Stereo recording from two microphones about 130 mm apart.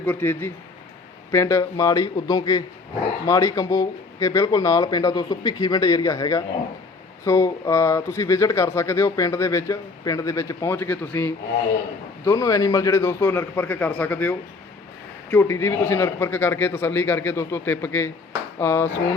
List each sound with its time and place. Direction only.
0.0 s a man's voice: 15° left (ahead or behind)